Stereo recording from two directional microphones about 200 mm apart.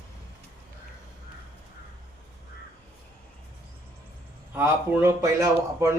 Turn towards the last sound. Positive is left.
turn(degrees=-15)  # may be behind; listen again after turning